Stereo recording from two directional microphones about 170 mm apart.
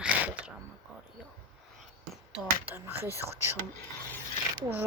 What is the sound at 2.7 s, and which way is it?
Speech, 10° right (ahead or behind).